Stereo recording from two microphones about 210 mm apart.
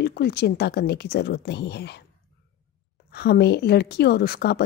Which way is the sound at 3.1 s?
50° left (ahead or behind).